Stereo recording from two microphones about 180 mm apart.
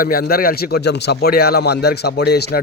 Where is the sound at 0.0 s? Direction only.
55° left (ahead or behind).